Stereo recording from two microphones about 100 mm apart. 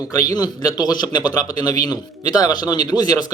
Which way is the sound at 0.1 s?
40° left (ahead or behind).